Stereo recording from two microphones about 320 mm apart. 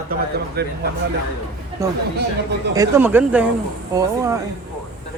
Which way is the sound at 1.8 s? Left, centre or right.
Centre.